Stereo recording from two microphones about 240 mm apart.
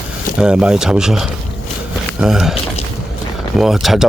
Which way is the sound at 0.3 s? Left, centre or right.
Centre.